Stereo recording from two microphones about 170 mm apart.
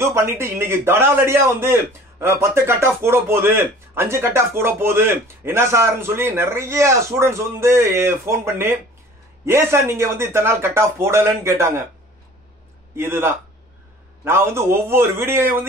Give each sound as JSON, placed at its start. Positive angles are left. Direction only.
{"t": 0.0, "sound": "a man's voice", "side_deg": -15}
{"t": 12.9, "sound": "a man's voice", "side_deg": -15}